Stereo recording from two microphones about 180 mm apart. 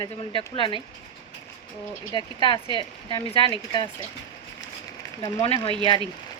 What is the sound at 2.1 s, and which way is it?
A woman's voice, 25° left (ahead or behind).